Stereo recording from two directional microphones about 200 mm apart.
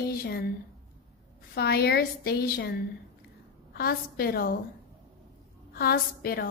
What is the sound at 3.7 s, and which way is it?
Speech, 50° left (ahead or behind).